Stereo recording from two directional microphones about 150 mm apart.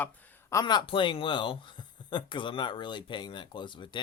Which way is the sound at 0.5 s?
30° left (ahead or behind).